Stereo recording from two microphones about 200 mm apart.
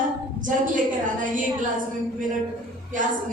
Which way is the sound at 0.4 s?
40° right (ahead or behind).